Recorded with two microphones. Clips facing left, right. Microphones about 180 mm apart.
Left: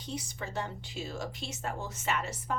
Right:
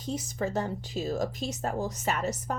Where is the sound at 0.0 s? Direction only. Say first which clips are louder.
Right 8 dB; 45° right (ahead or behind).